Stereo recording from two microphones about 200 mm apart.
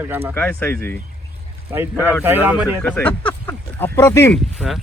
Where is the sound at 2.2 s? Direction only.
10° right (ahead or behind).